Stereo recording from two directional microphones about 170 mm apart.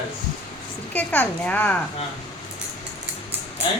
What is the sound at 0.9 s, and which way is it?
Speech, 10° left (ahead or behind).